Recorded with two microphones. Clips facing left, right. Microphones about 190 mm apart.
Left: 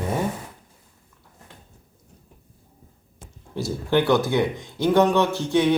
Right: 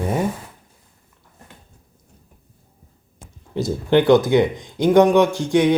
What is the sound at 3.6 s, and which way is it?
Speech, 20° right (ahead or behind).